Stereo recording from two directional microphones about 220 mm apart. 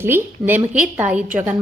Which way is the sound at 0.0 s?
10° right (ahead or behind).